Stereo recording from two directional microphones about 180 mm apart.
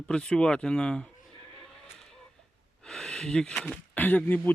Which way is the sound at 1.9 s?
5° left (ahead or behind).